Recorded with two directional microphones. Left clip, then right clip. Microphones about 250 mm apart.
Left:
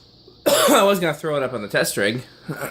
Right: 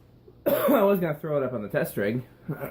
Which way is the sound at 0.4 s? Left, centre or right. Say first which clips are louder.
Left 6 dB; left.